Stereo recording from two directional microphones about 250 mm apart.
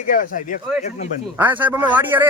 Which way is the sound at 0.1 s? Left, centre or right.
Left.